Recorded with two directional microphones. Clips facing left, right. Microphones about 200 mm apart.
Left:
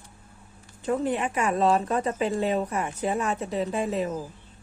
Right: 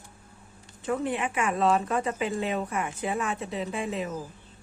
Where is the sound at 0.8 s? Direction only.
35° left (ahead or behind).